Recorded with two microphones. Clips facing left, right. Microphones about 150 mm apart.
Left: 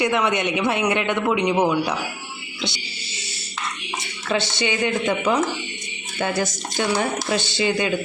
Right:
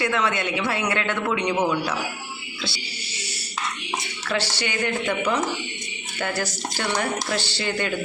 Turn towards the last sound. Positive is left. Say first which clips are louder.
# left 5 dB
turn(degrees=15)  # may be behind; listen again after turning